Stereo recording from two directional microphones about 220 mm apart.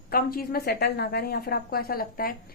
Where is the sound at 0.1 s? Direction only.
45° left (ahead or behind).